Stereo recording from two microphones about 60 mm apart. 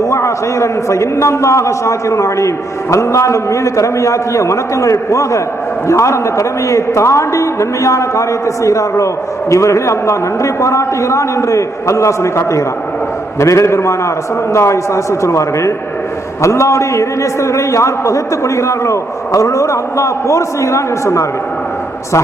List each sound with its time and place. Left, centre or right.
0.0 s a man's voice: left